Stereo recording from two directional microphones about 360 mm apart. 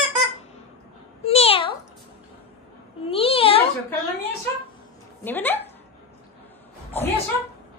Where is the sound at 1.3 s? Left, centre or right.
Centre.